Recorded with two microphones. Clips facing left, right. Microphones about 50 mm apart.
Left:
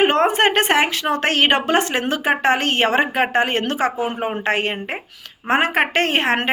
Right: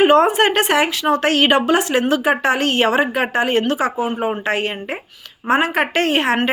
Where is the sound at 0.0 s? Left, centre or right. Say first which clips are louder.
Right 3 dB; left.